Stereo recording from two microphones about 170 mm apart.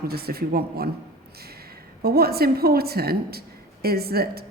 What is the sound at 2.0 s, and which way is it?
A woman's voice, 65° right (ahead or behind).